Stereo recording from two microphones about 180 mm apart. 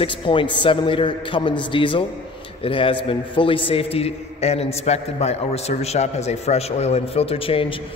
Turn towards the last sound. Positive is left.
turn(degrees=30)  # may be behind; listen again after turning